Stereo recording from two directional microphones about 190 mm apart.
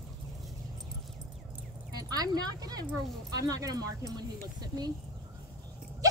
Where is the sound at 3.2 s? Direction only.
20° right (ahead or behind).